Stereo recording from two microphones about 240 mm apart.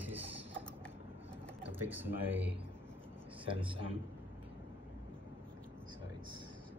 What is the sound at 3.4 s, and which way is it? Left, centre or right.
Speech, right.